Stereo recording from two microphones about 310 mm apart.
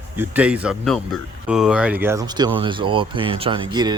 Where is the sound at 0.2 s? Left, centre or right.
Centre.